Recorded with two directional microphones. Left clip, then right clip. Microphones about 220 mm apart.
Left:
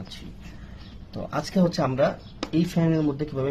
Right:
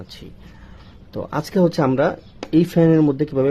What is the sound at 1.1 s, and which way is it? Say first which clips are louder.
Speech: right 5 dB; 55° right (ahead or behind).